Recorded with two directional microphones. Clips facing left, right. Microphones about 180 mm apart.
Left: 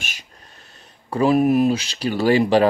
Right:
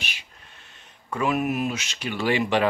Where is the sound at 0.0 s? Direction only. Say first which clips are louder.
Left 1 dB; 40° left (ahead or behind).